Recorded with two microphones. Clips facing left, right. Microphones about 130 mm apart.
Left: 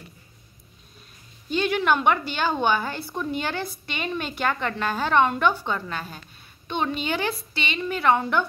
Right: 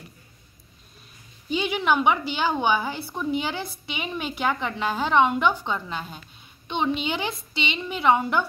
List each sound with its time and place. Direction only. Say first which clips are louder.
1.5 s a woman's voice: left 1 dB; 10° right (ahead or behind)